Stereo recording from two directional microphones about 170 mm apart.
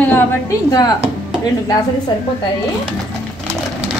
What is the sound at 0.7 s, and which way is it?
Speech, 20° left (ahead or behind).